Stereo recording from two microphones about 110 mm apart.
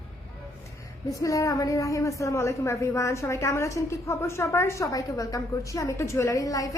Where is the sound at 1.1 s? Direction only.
30° left (ahead or behind).